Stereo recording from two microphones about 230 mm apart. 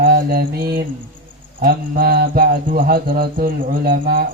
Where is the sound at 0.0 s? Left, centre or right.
Right.